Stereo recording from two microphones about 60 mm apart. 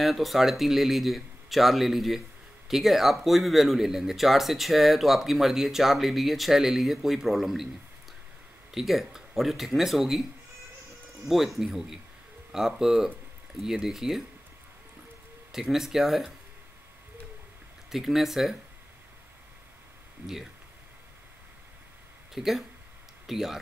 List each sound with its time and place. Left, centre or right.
0.0 s speech: centre
8.7 s speech: centre
11.2 s speech: centre
15.5 s speech: centre
17.9 s speech: centre
22.3 s speech: centre